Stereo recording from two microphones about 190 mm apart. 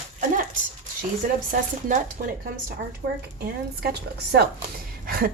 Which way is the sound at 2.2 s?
45° right (ahead or behind).